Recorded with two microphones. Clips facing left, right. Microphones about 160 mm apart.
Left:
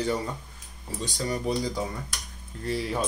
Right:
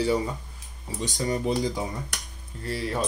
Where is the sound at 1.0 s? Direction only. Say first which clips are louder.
Right 2 dB; 20° right (ahead or behind).